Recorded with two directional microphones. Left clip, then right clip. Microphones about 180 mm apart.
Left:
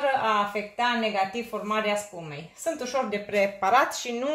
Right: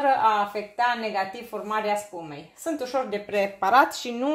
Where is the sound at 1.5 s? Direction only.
35° right (ahead or behind).